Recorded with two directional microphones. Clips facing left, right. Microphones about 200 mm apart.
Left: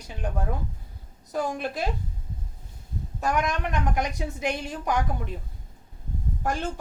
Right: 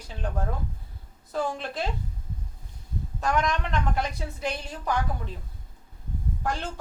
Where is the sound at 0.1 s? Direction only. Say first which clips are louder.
Left 1 dB; 15° left (ahead or behind).